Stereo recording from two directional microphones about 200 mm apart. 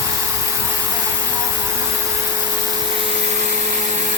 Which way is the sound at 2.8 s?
25° right (ahead or behind).